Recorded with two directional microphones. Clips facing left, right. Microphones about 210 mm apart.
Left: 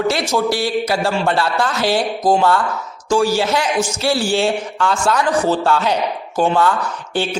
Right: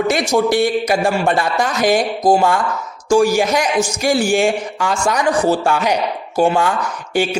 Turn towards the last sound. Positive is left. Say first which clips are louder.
# right 3 dB
turn(degrees=-10)  # may be behind; listen again after turning